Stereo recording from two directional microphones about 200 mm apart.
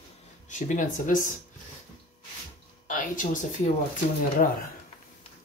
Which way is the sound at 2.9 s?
40° left (ahead or behind).